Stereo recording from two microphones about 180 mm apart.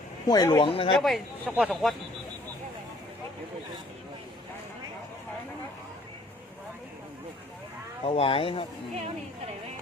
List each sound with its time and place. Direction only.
0.3 s speech: 20° left (ahead or behind)
0.9 s speech: centre (ahead or behind)
8.0 s speech: 30° left (ahead or behind)